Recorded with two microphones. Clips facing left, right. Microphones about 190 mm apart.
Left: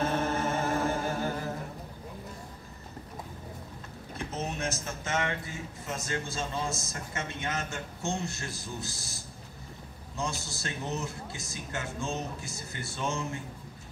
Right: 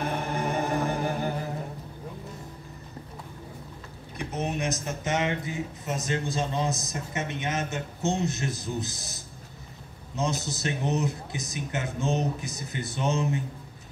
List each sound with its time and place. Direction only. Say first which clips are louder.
0.0 s music: left 1 dB; 15° right (ahead or behind)
4.3 s a man's voice: right 5 dB; 15° right (ahead or behind)